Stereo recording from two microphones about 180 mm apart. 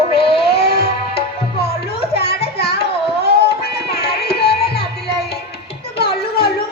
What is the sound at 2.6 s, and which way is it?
Carnatic music, 60° left (ahead or behind).